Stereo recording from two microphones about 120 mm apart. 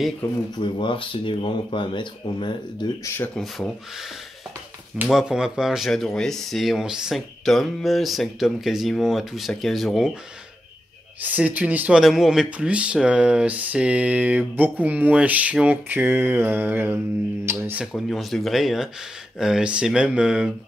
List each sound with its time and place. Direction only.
0.6 s speech: 45° left (ahead or behind)
3.3 s speech: 5° left (ahead or behind)
4.9 s speech: 10° right (ahead or behind)
11.1 s speech: 15° right (ahead or behind)
17.9 s speech: centre (ahead or behind)